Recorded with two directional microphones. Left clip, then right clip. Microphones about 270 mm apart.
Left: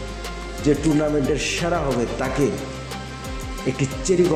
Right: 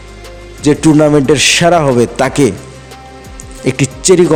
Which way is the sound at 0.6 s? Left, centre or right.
Right.